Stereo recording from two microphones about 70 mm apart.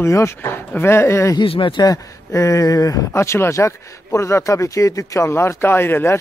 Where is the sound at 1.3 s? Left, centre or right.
Left.